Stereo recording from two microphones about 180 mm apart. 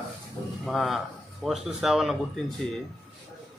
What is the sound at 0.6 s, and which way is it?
Speech, centre (ahead or behind).